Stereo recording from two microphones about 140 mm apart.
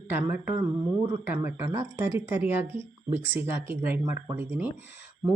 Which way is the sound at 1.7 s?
20° right (ahead or behind).